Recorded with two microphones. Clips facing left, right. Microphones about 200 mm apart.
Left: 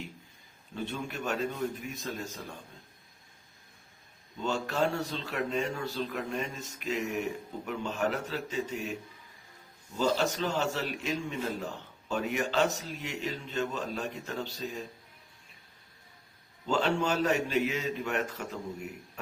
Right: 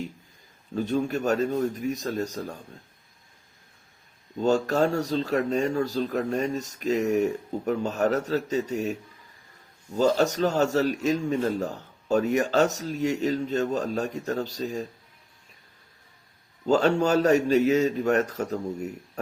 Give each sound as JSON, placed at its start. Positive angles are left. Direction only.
{"t": 0.7, "sound": "a man's voice", "side_deg": -40}
{"t": 4.4, "sound": "a man's voice", "side_deg": -40}
{"t": 16.6, "sound": "a man's voice", "side_deg": -40}